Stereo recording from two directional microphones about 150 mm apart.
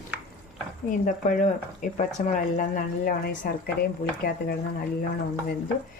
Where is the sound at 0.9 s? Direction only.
60° left (ahead or behind); by 4.5 s 90° left.